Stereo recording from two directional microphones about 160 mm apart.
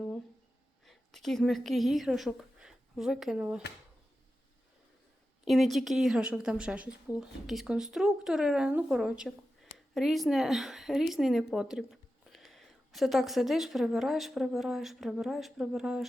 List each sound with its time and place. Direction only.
0.9 s a woman's voice: centre (ahead or behind)
5.5 s a woman's voice: centre (ahead or behind)